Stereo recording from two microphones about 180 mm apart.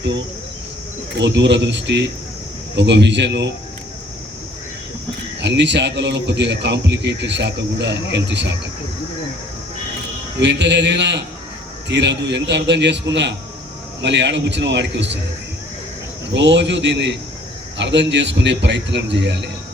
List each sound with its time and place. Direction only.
1.1 s a man's voice: 75° right (ahead or behind)
5.4 s a man's voice: 75° right (ahead or behind)
10.4 s a man's voice: 75° right (ahead or behind)
16.3 s a man's voice: 80° right